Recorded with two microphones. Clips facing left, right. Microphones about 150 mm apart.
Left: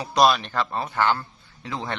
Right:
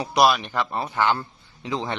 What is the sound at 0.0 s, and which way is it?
A man's voice, 10° right (ahead or behind).